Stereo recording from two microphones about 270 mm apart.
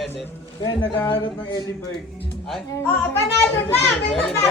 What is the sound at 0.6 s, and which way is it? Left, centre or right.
Speech, centre.